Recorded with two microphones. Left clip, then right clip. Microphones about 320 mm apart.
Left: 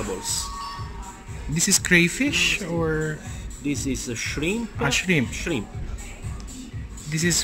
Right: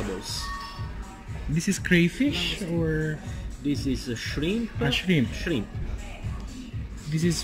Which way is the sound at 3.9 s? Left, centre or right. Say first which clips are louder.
Left 1 dB; left.